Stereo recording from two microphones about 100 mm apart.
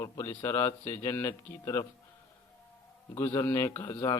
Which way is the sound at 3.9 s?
35° left (ahead or behind).